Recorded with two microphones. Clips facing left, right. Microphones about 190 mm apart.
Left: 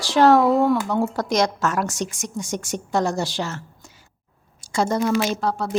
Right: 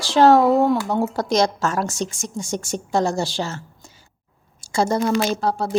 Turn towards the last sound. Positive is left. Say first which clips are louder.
# right 2 dB
turn(degrees=-35)  # may be behind; listen again after turning